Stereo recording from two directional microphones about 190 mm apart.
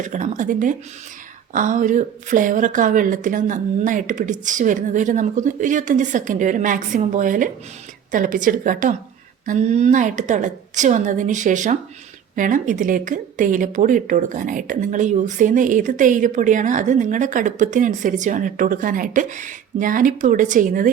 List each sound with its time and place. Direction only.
0.0 s a woman's voice: 40° right (ahead or behind)